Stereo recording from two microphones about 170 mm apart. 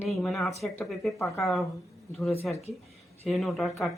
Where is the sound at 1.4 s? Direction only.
Centre (ahead or behind).